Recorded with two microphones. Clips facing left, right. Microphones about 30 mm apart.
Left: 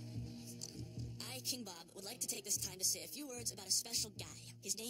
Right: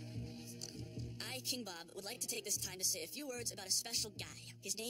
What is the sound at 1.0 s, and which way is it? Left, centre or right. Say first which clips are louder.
Speech: right 4 dB; right.